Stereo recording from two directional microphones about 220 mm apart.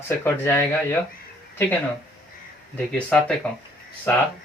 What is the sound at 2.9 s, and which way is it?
Speech, 5° left (ahead or behind).